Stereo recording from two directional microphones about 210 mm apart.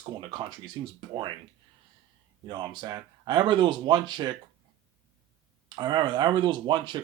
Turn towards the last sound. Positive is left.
turn(degrees=-20)  # may be behind; listen again after turning